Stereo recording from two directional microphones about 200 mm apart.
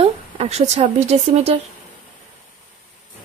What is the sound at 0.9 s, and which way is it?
Speech, 35° right (ahead or behind).